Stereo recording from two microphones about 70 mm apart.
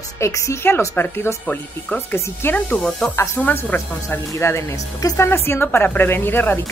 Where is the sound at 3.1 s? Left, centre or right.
Left.